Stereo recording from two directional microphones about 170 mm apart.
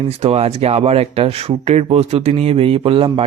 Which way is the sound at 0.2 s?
35° right (ahead or behind).